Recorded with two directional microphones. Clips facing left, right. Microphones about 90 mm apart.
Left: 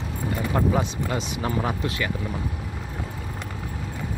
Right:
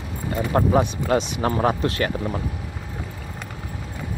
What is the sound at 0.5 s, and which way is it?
Speech, 40° right (ahead or behind).